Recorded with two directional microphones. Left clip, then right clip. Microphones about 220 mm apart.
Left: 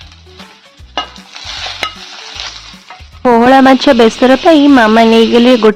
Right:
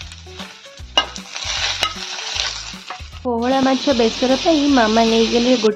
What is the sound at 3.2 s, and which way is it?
Speech, 50° left (ahead or behind).